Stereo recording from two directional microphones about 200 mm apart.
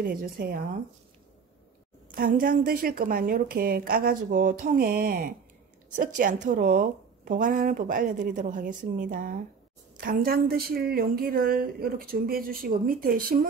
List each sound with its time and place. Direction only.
0.0 s a woman's voice: 50° right (ahead or behind)
2.0 s a woman's voice: 45° right (ahead or behind)